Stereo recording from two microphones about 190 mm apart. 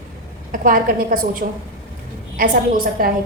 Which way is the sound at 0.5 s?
45° right (ahead or behind).